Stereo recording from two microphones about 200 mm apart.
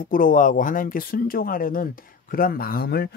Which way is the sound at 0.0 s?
45° left (ahead or behind).